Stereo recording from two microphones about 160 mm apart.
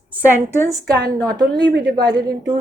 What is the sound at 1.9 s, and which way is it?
Speech, 25° right (ahead or behind).